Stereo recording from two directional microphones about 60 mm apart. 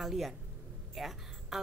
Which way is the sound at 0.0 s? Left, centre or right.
Centre.